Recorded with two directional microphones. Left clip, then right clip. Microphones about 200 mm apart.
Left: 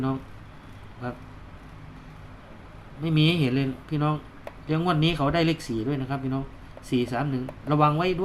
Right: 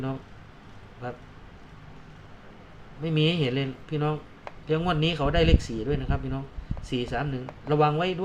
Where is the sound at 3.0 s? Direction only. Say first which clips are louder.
Left 1 dB; 15° left (ahead or behind).